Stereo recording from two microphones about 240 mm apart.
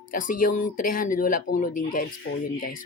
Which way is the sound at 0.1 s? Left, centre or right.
Left.